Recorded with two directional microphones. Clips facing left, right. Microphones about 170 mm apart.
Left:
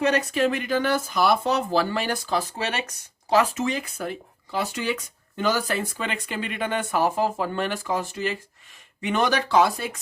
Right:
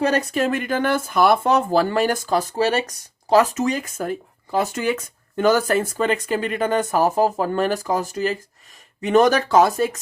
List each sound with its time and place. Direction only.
0.0 s speech: 35° right (ahead or behind)